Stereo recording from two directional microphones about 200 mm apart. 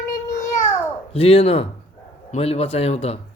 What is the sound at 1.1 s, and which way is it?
A man's voice, 30° left (ahead or behind).